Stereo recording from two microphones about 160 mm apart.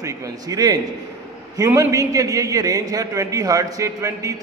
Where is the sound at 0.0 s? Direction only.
25° right (ahead or behind).